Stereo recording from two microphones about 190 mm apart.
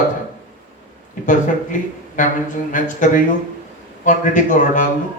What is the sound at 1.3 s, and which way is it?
A man's voice, 40° left (ahead or behind).